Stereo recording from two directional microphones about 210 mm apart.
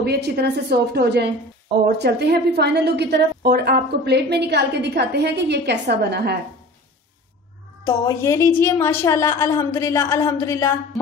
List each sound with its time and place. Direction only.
0.0 s a woman's voice: 50° right (ahead or behind)
7.8 s a woman's voice: 15° left (ahead or behind)